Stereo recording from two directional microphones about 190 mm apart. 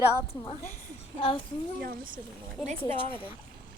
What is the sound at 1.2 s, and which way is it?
Child singing, 30° left (ahead or behind).